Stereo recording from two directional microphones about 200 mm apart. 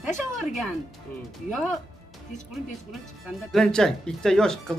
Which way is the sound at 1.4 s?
Centre (ahead or behind).